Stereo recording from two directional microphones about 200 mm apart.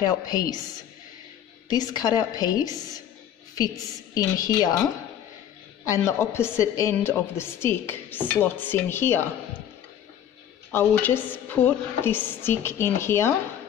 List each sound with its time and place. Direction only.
0.0 s a woman's voice: 20° left (ahead or behind)
1.7 s a woman's voice: 20° left (ahead or behind)
5.9 s a woman's voice: 15° left (ahead or behind)
10.7 s a woman's voice: 10° left (ahead or behind)